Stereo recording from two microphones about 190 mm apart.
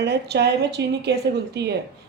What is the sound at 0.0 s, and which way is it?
A woman's voice, 60° right (ahead or behind).